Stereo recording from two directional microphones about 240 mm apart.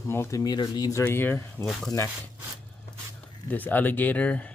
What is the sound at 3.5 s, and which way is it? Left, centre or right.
Speech, centre.